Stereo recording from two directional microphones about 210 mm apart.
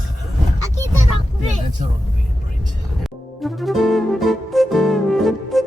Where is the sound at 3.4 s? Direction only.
Centre (ahead or behind).